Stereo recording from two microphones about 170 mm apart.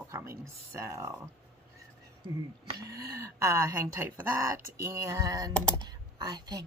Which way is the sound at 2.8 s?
20° right (ahead or behind).